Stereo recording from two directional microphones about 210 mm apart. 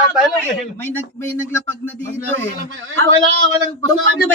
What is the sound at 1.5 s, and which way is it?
Speech, 10° left (ahead or behind).